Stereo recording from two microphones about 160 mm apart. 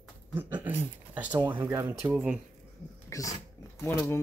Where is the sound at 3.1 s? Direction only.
20° left (ahead or behind).